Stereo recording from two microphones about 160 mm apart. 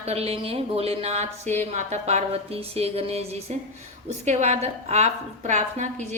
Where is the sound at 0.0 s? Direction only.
40° right (ahead or behind).